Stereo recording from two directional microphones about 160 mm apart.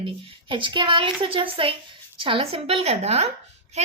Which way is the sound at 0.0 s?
35° right (ahead or behind).